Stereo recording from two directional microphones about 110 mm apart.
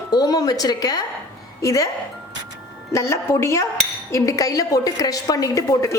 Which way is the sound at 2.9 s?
25° left (ahead or behind).